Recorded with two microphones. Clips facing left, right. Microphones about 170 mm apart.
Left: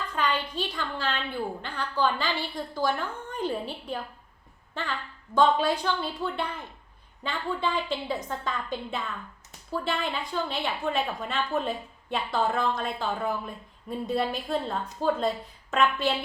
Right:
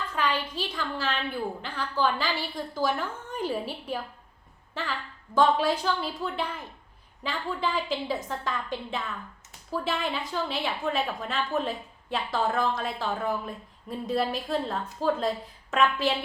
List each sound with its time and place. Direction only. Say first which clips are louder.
0.2 s a woman's voice: left 1 dB; 5° right (ahead or behind)